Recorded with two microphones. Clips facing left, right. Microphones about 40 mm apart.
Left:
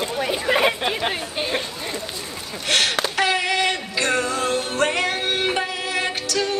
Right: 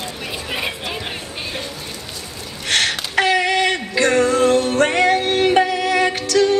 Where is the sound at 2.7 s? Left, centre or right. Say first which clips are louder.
Right 1 dB; right.